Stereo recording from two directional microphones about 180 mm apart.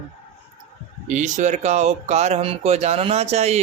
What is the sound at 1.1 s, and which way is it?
Speech, 40° right (ahead or behind).